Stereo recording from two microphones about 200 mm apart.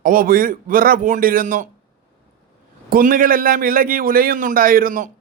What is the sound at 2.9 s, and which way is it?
A man's voice, 45° right (ahead or behind).